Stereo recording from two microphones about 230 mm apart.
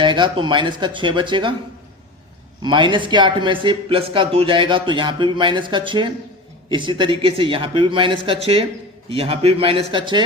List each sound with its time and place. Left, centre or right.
0.0 s speech: centre
2.6 s speech: centre